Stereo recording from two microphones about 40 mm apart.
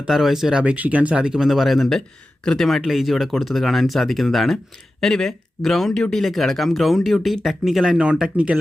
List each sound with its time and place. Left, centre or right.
0.1 s speech: centre
0.6 s speech: right
1.2 s speech: centre
1.5 s speech: centre
2.9 s speech: centre
4.5 s speech: centre
7.9 s speech: right